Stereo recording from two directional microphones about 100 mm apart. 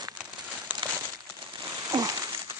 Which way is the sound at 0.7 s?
15° right (ahead or behind).